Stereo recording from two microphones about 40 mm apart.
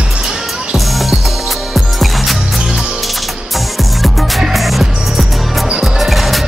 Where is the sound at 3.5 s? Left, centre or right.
Centre.